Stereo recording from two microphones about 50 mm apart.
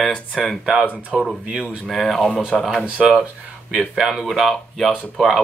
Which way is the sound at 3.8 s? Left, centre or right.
Centre.